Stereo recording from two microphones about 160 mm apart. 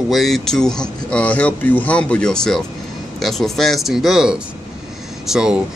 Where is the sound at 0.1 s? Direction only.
Centre (ahead or behind).